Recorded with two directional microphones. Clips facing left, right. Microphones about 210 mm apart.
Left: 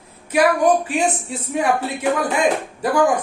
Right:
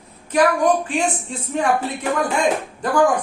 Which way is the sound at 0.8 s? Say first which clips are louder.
Left 1 dB; 10° left (ahead or behind).